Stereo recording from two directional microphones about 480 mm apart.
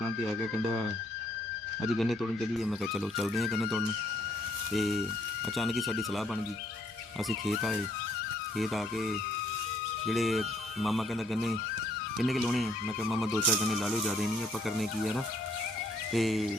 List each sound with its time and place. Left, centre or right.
2.6 s speech: centre
7.3 s speech: centre
12.2 s speech: centre